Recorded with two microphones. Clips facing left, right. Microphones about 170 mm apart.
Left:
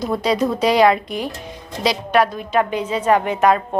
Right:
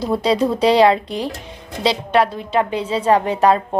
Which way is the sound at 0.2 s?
30° right (ahead or behind).